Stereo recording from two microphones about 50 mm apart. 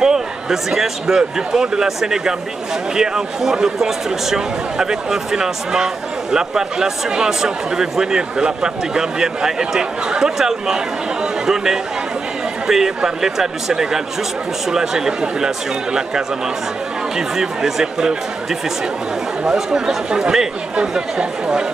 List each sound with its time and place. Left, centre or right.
0.0 s a man's voice: centre
17.4 s speech: centre
19.4 s speech: centre